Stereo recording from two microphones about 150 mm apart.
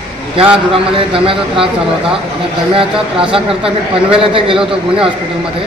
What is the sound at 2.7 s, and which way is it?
Speech, 35° right (ahead or behind).